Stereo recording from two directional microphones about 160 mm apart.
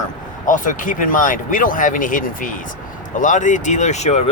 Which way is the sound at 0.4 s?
55° left (ahead or behind).